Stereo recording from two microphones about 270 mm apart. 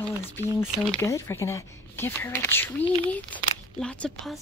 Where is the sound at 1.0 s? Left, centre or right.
Centre.